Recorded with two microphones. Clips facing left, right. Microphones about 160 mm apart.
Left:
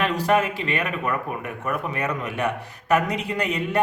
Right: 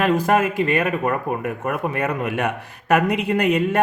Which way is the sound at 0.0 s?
45° right (ahead or behind).